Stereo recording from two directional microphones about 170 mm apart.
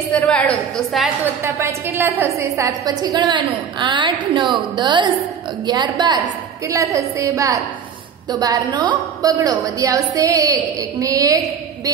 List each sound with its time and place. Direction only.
0.1 s a woman's voice: 5° left (ahead or behind)
1.2 s a woman's voice: 15° right (ahead or behind)